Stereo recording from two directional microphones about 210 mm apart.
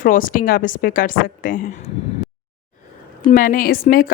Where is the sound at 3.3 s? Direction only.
40° left (ahead or behind).